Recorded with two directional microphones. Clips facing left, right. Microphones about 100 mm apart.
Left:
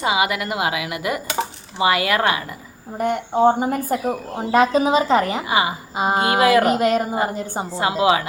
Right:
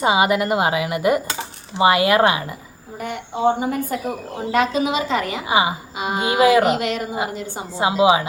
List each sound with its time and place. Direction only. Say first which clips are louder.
0.0 s speech: right 3 dB; 30° right (ahead or behind)
3.0 s a woman's voice: left 4 dB; 45° left (ahead or behind)
5.5 s speech: right 1 dB; 20° right (ahead or behind)
6.0 s a woman's voice: left 3 dB; 40° left (ahead or behind)
6.4 s speech: right 2 dB; 15° right (ahead or behind)
6.7 s a woman's voice: left 5 dB; 40° left (ahead or behind)
7.8 s speech: right 2 dB; 20° right (ahead or behind)